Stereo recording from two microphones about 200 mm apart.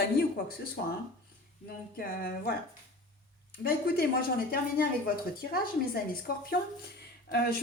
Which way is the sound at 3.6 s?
50° left (ahead or behind).